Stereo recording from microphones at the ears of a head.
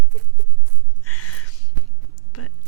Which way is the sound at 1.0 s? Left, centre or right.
Left.